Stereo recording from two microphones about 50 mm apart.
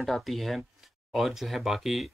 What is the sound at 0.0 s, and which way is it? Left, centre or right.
Speech, centre.